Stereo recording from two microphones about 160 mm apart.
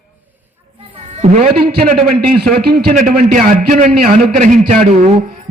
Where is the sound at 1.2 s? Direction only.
45° right (ahead or behind).